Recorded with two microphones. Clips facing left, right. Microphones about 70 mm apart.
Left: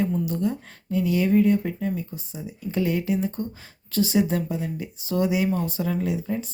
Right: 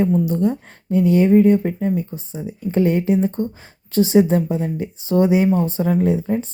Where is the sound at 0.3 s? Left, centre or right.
Right.